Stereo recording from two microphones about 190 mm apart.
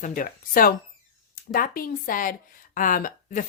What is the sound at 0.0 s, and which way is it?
Speech, 45° left (ahead or behind).